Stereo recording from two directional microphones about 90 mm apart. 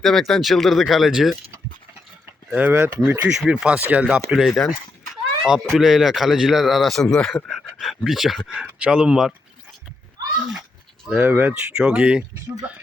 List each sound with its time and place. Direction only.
0.0 s speech: 5° left (ahead or behind)
2.6 s speech: 20° right (ahead or behind)
3.5 s speech: 10° right (ahead or behind)
4.3 s speech: 5° right (ahead or behind)
11.1 s speech: 20° right (ahead or behind)